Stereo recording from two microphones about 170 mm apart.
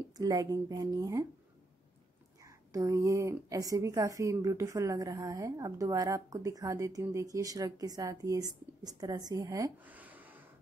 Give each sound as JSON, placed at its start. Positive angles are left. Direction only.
{"t": 0.2, "sound": "a woman's voice", "side_deg": -20}
{"t": 2.7, "sound": "a woman's voice", "side_deg": -20}
{"t": 9.8, "sound": "a sound", "side_deg": -10}